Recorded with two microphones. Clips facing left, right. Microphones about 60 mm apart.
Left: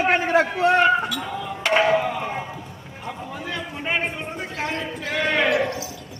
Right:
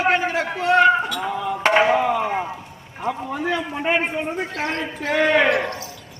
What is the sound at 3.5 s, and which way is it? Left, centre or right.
Speech, centre.